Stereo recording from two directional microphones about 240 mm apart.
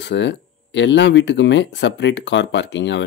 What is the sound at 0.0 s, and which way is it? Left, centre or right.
Speech, left.